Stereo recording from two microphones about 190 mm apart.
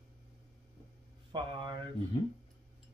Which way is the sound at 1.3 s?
25° right (ahead or behind).